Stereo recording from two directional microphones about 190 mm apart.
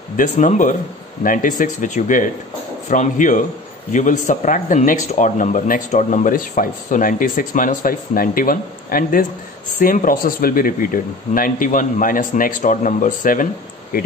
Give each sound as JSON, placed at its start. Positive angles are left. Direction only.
{"t": 0.2, "sound": "speech", "side_deg": 40}